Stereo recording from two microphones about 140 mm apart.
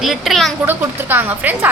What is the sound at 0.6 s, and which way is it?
Speech, 15° right (ahead or behind).